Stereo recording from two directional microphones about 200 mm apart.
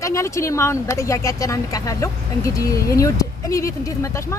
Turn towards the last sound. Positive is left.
turn(degrees=15)  # may be behind; listen again after turning